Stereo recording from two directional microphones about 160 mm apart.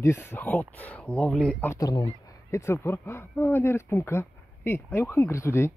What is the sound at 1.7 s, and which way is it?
Speech, 25° left (ahead or behind).